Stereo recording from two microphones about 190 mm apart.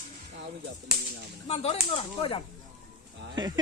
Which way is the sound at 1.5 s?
35° left (ahead or behind).